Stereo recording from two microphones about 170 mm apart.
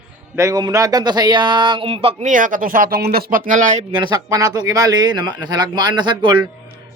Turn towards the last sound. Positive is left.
turn(degrees=-30)  # may be behind; listen again after turning